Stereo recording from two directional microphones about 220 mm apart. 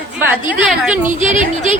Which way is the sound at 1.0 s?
35° right (ahead or behind).